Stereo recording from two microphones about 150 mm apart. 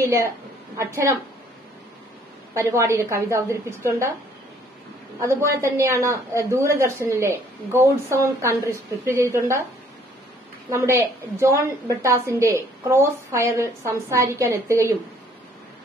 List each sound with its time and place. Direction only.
0.0 s a woman's voice: 20° right (ahead or behind)
2.5 s a woman's voice: 20° right (ahead or behind)
5.2 s speech: 15° right (ahead or behind)
10.7 s a woman's voice: 15° right (ahead or behind)